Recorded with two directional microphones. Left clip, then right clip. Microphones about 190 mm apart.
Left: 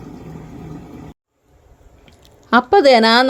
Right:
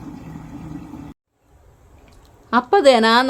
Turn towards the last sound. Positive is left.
turn(degrees=15)  # may be behind; listen again after turning